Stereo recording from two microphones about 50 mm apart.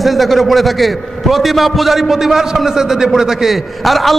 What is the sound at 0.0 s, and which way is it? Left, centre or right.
A man's voice, centre.